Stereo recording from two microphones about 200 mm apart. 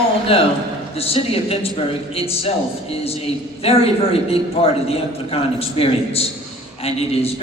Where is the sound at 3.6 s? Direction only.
30° left (ahead or behind).